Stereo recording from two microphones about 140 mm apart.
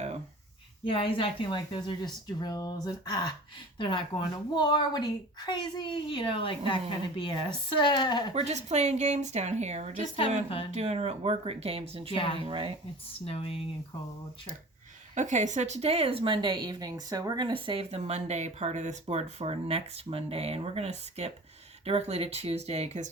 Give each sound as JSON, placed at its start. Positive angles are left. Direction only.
{"t": 0.9, "sound": "a woman's voice", "side_deg": 40}
{"t": 2.4, "sound": "a sound", "side_deg": 30}
{"t": 3.8, "sound": "a woman's voice", "side_deg": 35}
{"t": 8.3, "sound": "speech", "side_deg": -50}
{"t": 12.1, "sound": "a woman's voice", "side_deg": 40}
{"t": 12.4, "sound": "speech", "side_deg": -40}
{"t": 13.2, "sound": "speech", "side_deg": 45}
{"t": 15.1, "sound": "speech", "side_deg": -60}